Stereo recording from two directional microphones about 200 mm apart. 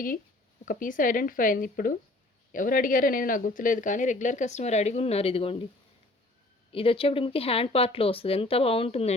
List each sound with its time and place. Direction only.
0.6 s speech: 40° left (ahead or behind)
6.7 s speech: 25° left (ahead or behind)